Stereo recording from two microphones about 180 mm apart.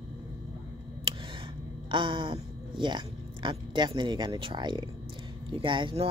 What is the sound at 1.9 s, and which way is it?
Speech, 25° right (ahead or behind).